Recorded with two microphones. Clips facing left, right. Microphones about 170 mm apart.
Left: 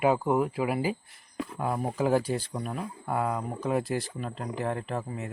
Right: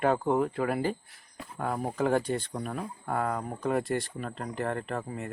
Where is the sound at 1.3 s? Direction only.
90° left.